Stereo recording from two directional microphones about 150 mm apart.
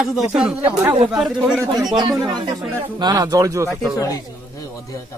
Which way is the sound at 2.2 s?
30° right (ahead or behind).